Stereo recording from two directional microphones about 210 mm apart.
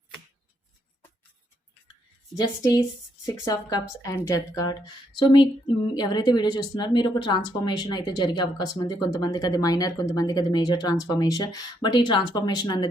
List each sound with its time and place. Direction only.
2.3 s speech: 20° left (ahead or behind)